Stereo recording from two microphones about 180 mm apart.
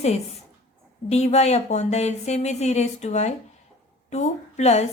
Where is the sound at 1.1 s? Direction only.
35° left (ahead or behind).